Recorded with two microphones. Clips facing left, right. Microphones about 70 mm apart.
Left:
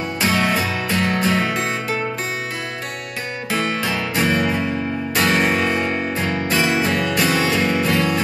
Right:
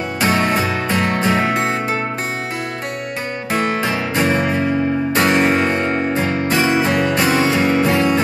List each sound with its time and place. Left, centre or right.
0.2 s music: right
3.7 s music: right